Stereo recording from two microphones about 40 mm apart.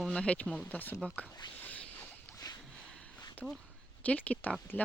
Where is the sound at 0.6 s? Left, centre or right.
Left.